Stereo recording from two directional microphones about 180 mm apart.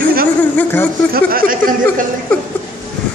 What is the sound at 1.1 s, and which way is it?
Speech, 55° right (ahead or behind).